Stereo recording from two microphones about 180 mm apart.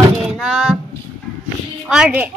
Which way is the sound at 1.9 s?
5° right (ahead or behind).